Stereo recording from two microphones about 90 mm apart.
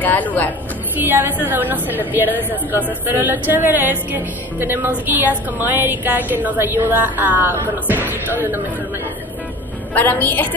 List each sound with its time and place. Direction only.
0.0 s a woman's voice: 20° left (ahead or behind)
0.9 s music: 20° right (ahead or behind)
9.9 s a woman's voice: 20° left (ahead or behind)